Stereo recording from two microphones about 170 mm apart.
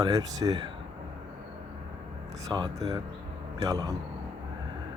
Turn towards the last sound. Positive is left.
turn(degrees=-20)  # may be behind; listen again after turning